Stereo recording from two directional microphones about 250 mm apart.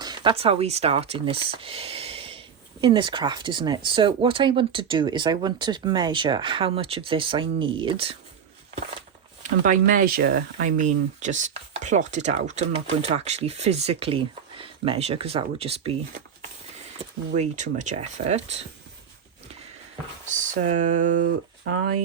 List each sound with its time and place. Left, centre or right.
0.0 s speech: centre
9.4 s speech: right
20.3 s speech: right